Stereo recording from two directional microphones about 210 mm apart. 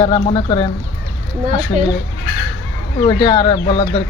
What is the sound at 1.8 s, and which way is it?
Speech, 35° right (ahead or behind).